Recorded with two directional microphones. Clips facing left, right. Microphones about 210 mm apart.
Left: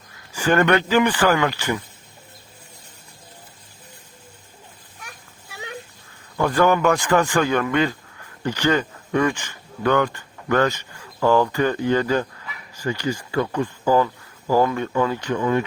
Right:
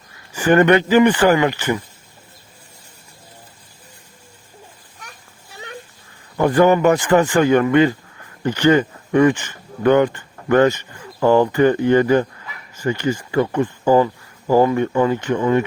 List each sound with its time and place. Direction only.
0.3 s speech: 15° right (ahead or behind)
6.3 s speech: 20° right (ahead or behind)